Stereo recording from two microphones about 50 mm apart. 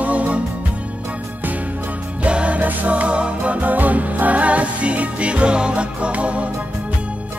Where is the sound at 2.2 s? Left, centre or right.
Right.